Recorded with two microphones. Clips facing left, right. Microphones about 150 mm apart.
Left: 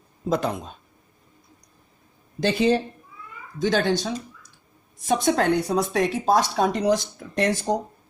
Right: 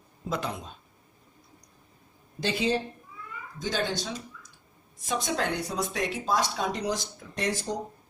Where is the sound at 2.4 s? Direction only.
60° left (ahead or behind).